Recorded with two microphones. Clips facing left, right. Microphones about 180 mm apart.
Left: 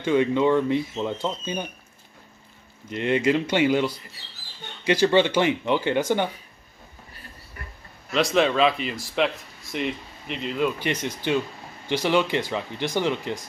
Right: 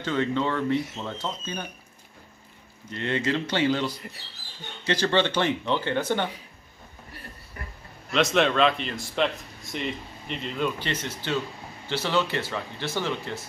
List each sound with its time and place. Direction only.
0.0 s speech: 15° left (ahead or behind)
2.9 s speech: 15° left (ahead or behind)
8.1 s speech: centre (ahead or behind)